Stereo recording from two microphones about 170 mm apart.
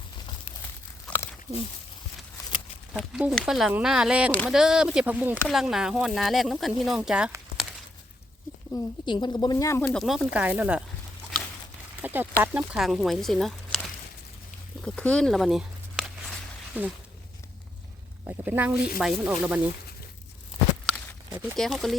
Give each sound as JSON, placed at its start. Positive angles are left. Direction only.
{"t": 1.1, "sound": "a sound", "side_deg": 10}
{"t": 2.9, "sound": "speech", "side_deg": 0}
{"t": 8.7, "sound": "speech", "side_deg": 25}
{"t": 9.8, "sound": "speech", "side_deg": 5}
{"t": 12.0, "sound": "speech", "side_deg": -10}
{"t": 14.8, "sound": "a sound", "side_deg": 5}
{"t": 18.3, "sound": "speech", "side_deg": -10}
{"t": 21.5, "sound": "speech", "side_deg": 0}